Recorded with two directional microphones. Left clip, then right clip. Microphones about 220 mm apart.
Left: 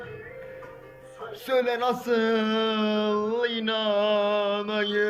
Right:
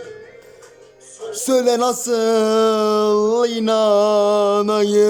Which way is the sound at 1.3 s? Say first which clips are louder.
Right 8 dB; 25° right (ahead or behind).